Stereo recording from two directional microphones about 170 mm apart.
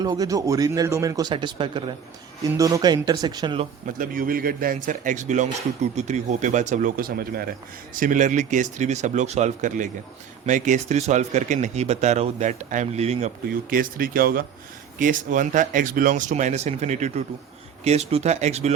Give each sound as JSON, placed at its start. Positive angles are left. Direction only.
{"t": 0.0, "sound": "speech", "side_deg": -20}
{"t": 3.8, "sound": "speech", "side_deg": -55}
{"t": 7.9, "sound": "speech", "side_deg": -50}
{"t": 13.5, "sound": "speech", "side_deg": -55}